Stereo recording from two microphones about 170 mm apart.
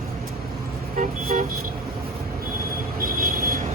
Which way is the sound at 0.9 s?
50° right (ahead or behind).